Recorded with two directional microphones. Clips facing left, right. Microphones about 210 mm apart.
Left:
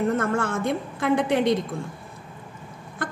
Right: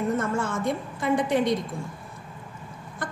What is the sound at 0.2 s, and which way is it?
A woman's voice, 60° left (ahead or behind).